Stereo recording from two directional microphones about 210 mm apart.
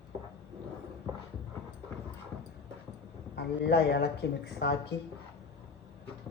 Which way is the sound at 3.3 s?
50° left (ahead or behind).